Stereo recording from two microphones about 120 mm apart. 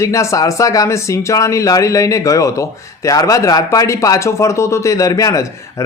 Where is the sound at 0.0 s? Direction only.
25° left (ahead or behind).